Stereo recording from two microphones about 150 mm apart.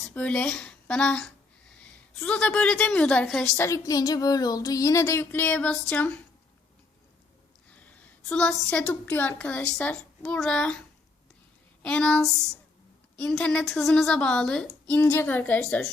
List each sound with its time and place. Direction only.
0.1 s a woman's voice: 10° left (ahead or behind)
3.6 s a sound: 20° left (ahead or behind)
5.9 s a woman's voice: 5° left (ahead or behind)
7.7 s a woman's voice: 10° left (ahead or behind)
11.8 s a woman's voice: 5° left (ahead or behind)